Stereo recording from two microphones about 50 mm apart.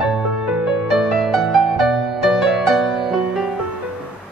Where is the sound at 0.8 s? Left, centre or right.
Centre.